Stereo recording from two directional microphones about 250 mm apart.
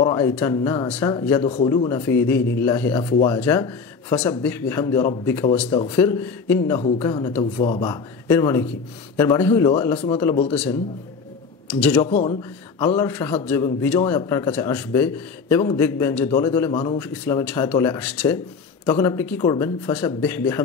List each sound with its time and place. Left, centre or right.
0.0 s speech: centre
1.4 s speech: left
10.5 s a man's voice: centre
11.8 s a man's voice: centre
12.1 s speech: left
12.8 s speech: centre
17.0 s speech: centre